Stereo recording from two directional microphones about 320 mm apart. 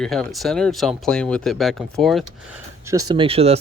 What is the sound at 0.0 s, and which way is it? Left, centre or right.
Speech, centre.